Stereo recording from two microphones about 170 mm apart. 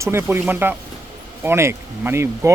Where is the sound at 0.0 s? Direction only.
15° right (ahead or behind).